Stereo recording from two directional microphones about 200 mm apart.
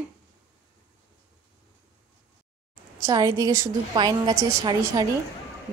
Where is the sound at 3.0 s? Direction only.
15° right (ahead or behind).